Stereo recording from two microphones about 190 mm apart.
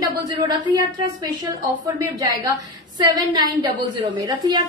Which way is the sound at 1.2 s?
20° right (ahead or behind).